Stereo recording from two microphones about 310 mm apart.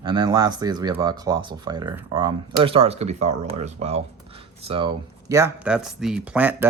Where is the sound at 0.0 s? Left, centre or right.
Centre.